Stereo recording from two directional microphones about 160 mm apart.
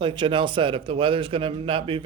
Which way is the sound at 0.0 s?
30° right (ahead or behind).